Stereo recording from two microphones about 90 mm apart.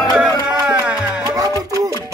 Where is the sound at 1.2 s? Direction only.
40° right (ahead or behind).